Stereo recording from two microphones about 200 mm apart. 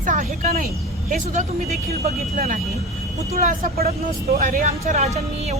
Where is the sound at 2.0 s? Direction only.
45° right (ahead or behind).